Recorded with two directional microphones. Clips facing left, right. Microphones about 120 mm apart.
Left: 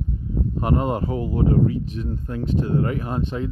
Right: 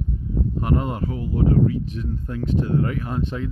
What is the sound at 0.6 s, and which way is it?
Speech, 30° left (ahead or behind).